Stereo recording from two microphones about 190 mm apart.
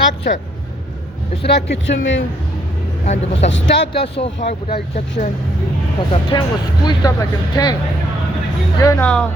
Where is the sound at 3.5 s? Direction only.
65° left (ahead or behind).